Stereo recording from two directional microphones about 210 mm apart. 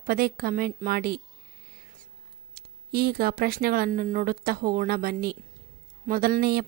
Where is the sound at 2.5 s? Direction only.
45° right (ahead or behind).